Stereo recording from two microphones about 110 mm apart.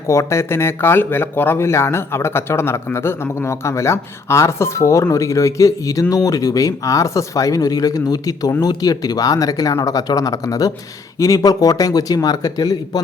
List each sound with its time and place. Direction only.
0.1 s speech: 25° left (ahead or behind)